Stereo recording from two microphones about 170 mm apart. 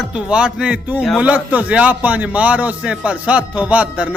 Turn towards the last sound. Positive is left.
turn(degrees=-5)  # may be behind; listen again after turning